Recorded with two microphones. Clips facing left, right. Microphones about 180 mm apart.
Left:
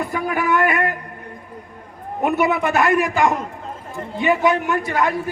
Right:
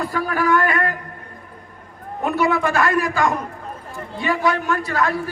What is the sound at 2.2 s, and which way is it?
A man's voice, 20° left (ahead or behind).